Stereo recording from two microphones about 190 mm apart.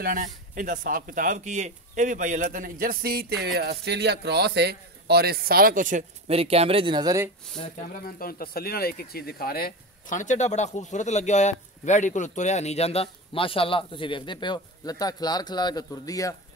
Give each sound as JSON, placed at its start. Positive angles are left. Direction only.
{"t": 0.0, "sound": "a man's voice", "side_deg": -45}
{"t": 7.5, "sound": "speech", "side_deg": 50}